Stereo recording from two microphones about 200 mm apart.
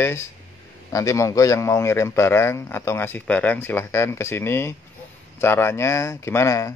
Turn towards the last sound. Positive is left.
turn(degrees=15)  # may be behind; listen again after turning